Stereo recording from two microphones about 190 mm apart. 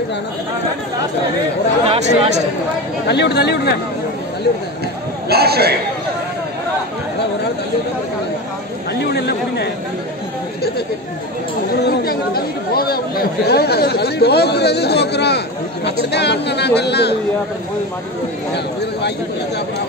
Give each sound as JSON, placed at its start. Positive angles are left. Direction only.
{"t": 1.9, "sound": "speech", "side_deg": -35}
{"t": 3.1, "sound": "speech", "side_deg": 60}
{"t": 5.3, "sound": "a man's voice", "side_deg": -55}
{"t": 9.1, "sound": "a sound", "side_deg": 60}
{"t": 11.8, "sound": "speech", "side_deg": 55}
{"t": 18.5, "sound": "speech", "side_deg": 60}